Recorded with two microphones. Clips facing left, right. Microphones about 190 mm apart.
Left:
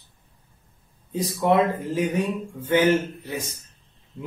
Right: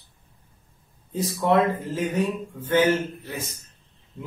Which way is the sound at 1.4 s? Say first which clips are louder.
Left 1 dB; 15° left (ahead or behind).